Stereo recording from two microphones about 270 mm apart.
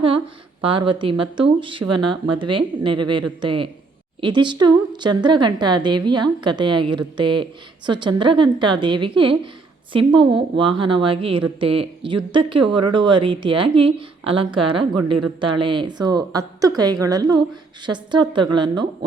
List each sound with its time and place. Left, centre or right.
0.6 s a woman's voice: centre